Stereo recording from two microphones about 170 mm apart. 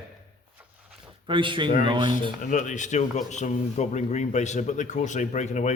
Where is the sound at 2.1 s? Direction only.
50° left (ahead or behind).